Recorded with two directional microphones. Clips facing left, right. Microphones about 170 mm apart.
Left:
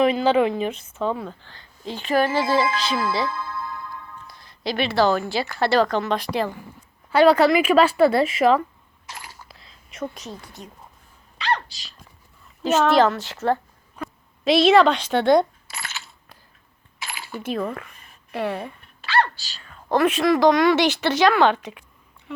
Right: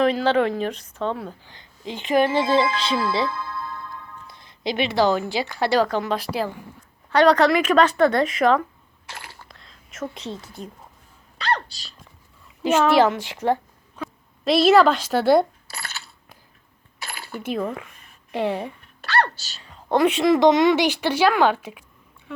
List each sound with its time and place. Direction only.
0.0 s a woman's voice: 5° left (ahead or behind); by 3.3 s 25° right (ahead or behind)
3.3 s music: 20° left (ahead or behind)
3.8 s speech: 20° right (ahead or behind); by 6.5 s 5° right (ahead or behind)
7.1 s speech: 5° left (ahead or behind)
9.5 s whispering: 5° left (ahead or behind)
10.2 s a woman's voice: 25° right (ahead or behind)
12.6 s a woman's voice: 10° right (ahead or behind)
13.9 s speech: centre (ahead or behind)
17.1 s a sound: 50° right (ahead or behind)
17.4 s a woman's voice: 10° right (ahead or behind)